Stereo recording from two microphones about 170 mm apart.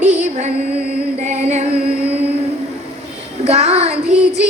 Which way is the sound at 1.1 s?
40° right (ahead or behind).